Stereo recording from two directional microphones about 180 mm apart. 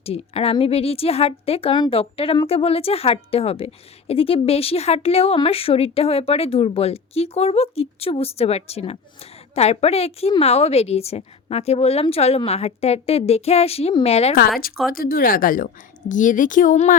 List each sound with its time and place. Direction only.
0.0 s speech: 35° left (ahead or behind)
14.9 s a woman's voice: 55° left (ahead or behind)